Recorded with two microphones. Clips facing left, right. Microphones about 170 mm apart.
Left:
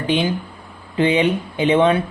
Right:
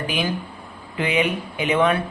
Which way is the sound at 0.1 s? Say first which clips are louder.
Left 5 dB; 25° left (ahead or behind).